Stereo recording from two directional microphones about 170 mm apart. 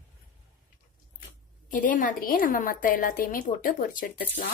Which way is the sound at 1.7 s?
50° left (ahead or behind).